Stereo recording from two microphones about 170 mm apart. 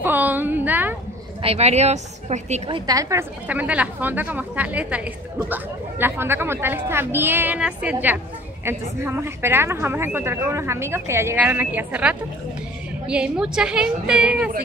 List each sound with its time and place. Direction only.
0.0 s a sound: 10° right (ahead or behind)
1.4 s a woman's voice: 35° right (ahead or behind)
2.9 s a woman's voice: 20° right (ahead or behind)
3.4 s a woman's voice: 10° right (ahead or behind)